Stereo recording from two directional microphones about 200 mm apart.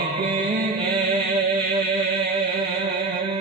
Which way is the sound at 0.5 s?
50° right (ahead or behind).